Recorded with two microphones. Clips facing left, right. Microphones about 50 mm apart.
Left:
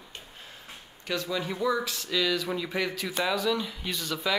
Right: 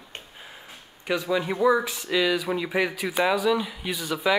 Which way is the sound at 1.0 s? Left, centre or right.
Centre.